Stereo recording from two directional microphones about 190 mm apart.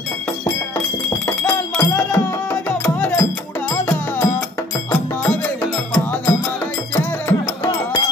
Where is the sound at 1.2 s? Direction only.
10° left (ahead or behind).